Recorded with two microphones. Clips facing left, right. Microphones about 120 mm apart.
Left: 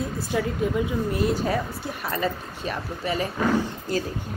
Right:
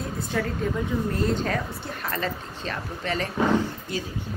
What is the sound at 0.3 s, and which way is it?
Speech, 10° left (ahead or behind).